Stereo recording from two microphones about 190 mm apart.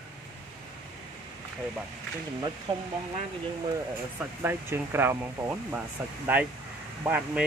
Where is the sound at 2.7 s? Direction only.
25° right (ahead or behind).